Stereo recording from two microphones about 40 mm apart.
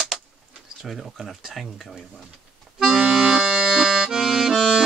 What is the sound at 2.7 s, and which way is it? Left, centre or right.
Accordion, centre.